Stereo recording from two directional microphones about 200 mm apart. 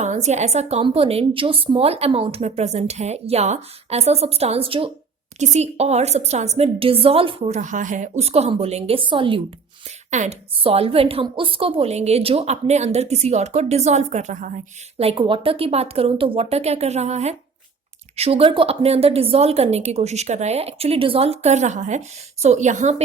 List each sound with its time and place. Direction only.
0.0 s a woman's voice: 35° right (ahead or behind)
14.9 s a woman's voice: 25° right (ahead or behind)